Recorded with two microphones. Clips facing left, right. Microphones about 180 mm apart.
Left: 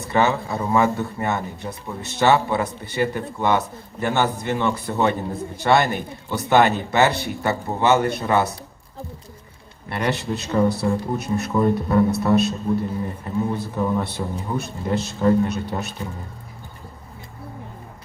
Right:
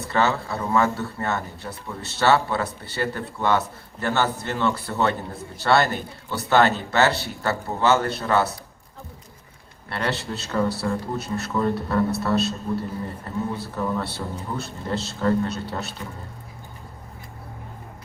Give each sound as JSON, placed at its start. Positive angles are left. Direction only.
{"t": 0.1, "sound": "speech", "side_deg": 15}
{"t": 9.9, "sound": "speech", "side_deg": 15}